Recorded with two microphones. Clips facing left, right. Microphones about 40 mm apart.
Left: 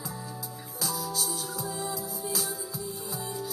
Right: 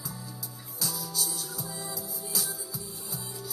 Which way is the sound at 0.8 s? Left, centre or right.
Centre.